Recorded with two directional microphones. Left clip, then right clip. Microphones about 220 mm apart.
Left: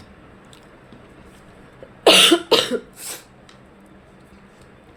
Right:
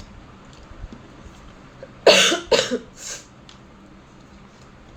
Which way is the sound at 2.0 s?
50° left (ahead or behind).